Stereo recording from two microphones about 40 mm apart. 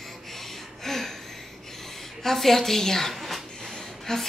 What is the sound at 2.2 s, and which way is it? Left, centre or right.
Speech, centre.